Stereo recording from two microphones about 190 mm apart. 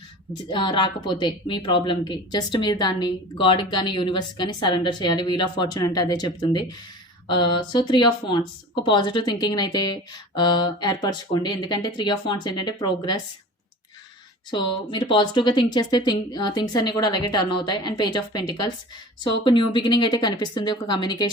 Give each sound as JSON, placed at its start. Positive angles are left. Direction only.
{"t": 0.5, "sound": "a woman's voice", "side_deg": 25}
{"t": 14.5, "sound": "a woman's voice", "side_deg": 25}